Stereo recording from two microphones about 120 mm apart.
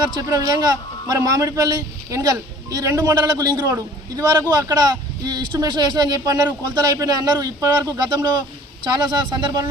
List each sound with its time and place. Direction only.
0.0 s a man's voice: 35° right (ahead or behind)